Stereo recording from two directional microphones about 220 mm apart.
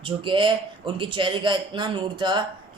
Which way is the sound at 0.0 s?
20° right (ahead or behind).